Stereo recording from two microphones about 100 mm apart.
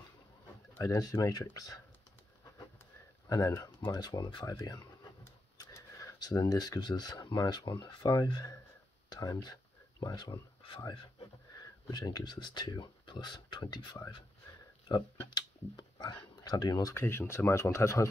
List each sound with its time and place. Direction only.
0.7 s speech: 35° left (ahead or behind)
3.3 s speech: 40° left (ahead or behind)
5.6 s a sound: 30° left (ahead or behind)
6.5 s speech: 40° left (ahead or behind)
16.9 s speech: 25° left (ahead or behind)